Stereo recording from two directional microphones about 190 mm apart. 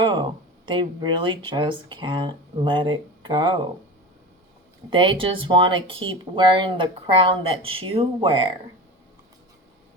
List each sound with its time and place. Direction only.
0.0 s speech: 25° right (ahead or behind)
4.9 s speech: 25° right (ahead or behind)